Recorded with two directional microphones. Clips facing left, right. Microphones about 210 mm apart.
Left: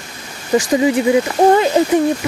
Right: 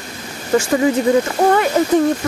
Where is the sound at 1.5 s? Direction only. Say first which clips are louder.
Left 3 dB; 25° left (ahead or behind).